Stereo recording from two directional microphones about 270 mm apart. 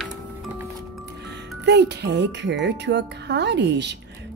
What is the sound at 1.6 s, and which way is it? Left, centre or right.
Speech, right.